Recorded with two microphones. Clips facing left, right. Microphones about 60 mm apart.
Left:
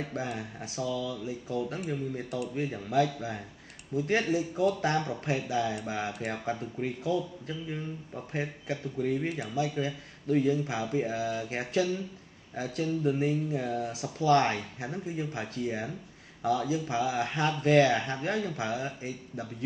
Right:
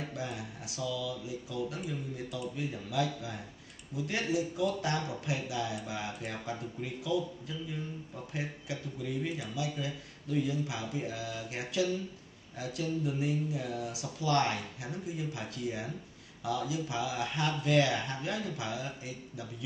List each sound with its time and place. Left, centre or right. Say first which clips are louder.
0.1 s speech: left 4 dB; left